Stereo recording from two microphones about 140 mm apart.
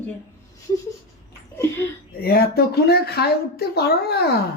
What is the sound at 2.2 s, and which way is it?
Speech, 90° left.